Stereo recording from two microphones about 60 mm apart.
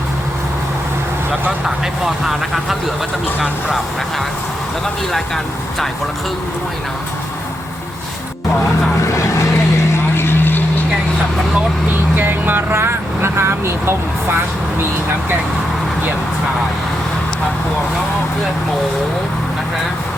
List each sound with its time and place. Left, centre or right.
9.0 s vehicle: left
9.7 s vehicle: left
12.1 s speech: right